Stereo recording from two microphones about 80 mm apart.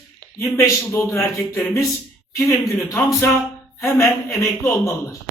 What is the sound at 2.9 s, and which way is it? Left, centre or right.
A man's voice, left.